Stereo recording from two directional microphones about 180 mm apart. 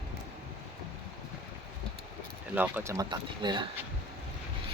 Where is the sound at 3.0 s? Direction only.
25° right (ahead or behind).